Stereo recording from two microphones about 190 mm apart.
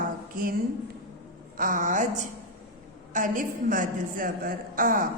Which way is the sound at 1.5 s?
45° right (ahead or behind).